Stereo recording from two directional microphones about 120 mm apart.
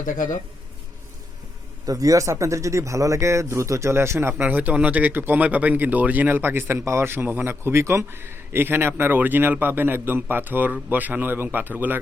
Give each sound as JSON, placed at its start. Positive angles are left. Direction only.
{"t": 0.0, "sound": "speech", "side_deg": 90}
{"t": 1.9, "sound": "speech", "side_deg": -30}